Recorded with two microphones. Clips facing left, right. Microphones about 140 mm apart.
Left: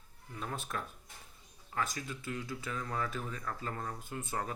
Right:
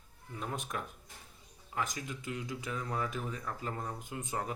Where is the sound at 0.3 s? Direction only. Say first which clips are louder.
Right 1 dB; 15° right (ahead or behind).